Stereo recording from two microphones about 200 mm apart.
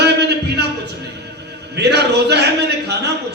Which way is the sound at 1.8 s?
55° right (ahead or behind).